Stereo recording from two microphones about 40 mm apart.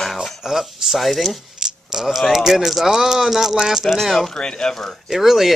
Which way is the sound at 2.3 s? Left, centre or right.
Centre.